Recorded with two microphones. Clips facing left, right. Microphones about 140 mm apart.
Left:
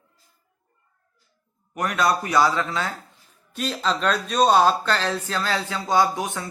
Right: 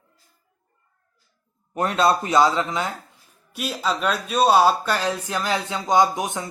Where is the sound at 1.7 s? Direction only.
30° right (ahead or behind).